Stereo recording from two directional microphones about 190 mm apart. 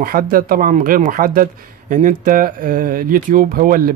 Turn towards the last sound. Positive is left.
turn(degrees=-45)  # may be behind; listen again after turning